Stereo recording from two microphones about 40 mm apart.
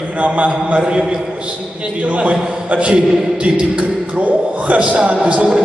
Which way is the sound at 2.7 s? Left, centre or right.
Right.